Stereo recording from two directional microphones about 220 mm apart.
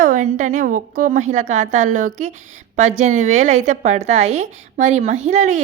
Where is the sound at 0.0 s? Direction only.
35° right (ahead or behind).